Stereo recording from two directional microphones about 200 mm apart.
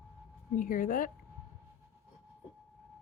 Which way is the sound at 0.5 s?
45° left (ahead or behind).